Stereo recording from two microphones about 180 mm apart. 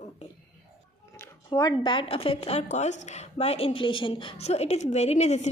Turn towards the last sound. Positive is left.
turn(degrees=40)  # may be behind; listen again after turning